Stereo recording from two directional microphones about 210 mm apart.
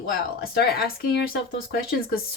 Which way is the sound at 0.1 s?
45° left (ahead or behind).